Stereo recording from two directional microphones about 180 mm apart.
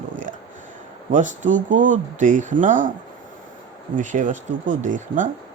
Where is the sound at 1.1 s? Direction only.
45° right (ahead or behind).